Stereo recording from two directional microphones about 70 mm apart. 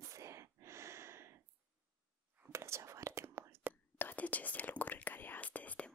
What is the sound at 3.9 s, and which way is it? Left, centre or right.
Whispering, left.